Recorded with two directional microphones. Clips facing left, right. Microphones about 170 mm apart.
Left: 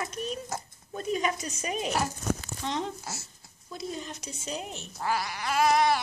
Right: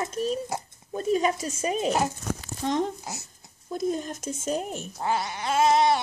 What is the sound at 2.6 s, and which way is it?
Speech, 45° right (ahead or behind).